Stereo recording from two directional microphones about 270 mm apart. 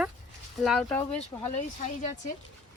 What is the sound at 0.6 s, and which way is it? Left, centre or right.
Speech, centre.